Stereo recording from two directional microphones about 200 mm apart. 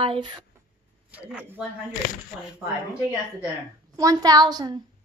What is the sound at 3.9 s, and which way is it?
Speech, 15° right (ahead or behind).